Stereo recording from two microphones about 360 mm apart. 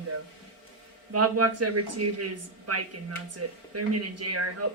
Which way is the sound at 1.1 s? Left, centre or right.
Right.